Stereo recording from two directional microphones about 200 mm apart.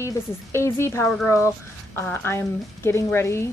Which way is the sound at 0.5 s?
15° left (ahead or behind).